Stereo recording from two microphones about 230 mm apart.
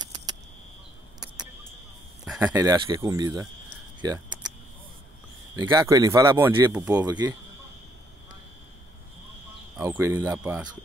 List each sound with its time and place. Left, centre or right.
2.2 s speech: centre
2.5 s speech: centre
5.6 s speech: centre
7.1 s speech: centre
9.8 s speech: centre